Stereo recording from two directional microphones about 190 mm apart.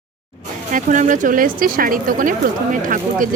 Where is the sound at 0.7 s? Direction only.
45° right (ahead or behind).